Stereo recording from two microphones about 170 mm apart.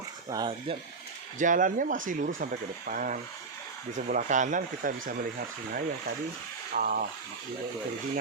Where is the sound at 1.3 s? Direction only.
50° right (ahead or behind).